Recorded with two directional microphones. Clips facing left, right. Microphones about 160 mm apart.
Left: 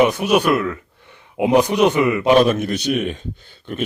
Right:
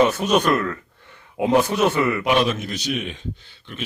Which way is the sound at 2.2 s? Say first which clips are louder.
Left 8 dB; 35° left (ahead or behind).